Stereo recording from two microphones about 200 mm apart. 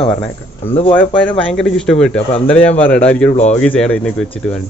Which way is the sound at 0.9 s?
5° left (ahead or behind).